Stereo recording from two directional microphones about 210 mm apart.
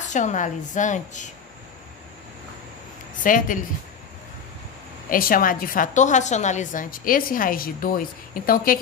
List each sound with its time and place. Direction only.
0.1 s a woman's voice: 35° left (ahead or behind)
3.2 s speech: 40° left (ahead or behind)
5.1 s a woman's voice: 40° left (ahead or behind)